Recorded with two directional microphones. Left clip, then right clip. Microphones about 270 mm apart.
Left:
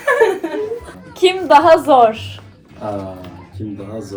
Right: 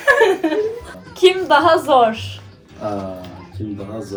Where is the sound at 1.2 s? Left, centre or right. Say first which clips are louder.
Left 2 dB; left.